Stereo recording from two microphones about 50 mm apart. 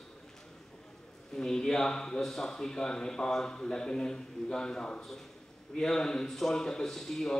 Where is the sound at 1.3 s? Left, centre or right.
Centre.